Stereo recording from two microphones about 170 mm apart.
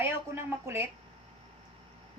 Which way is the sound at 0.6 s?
15° right (ahead or behind).